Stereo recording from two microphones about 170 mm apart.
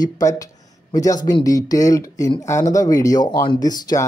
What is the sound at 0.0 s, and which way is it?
Speech, 20° left (ahead or behind).